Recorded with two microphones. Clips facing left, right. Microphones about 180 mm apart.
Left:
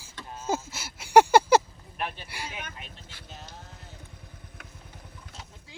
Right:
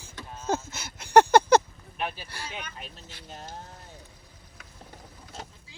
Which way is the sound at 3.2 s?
50° right (ahead or behind).